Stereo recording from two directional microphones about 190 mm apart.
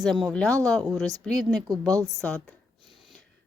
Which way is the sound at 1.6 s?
20° right (ahead or behind).